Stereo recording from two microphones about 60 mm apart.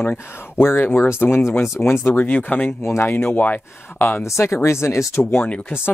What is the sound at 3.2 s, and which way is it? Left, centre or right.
Speech, left.